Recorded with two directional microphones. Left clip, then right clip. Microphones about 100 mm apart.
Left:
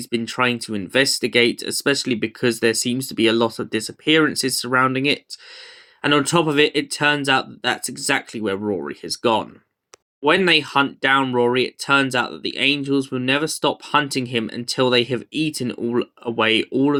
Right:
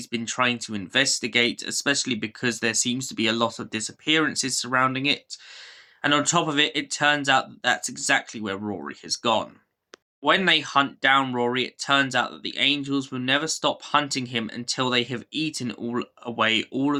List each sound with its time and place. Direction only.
0.0 s speech: 30° left (ahead or behind)